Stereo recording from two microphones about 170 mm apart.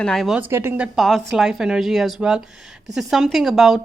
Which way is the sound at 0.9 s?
Centre (ahead or behind).